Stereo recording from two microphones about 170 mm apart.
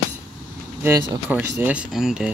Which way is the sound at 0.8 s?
15° right (ahead or behind).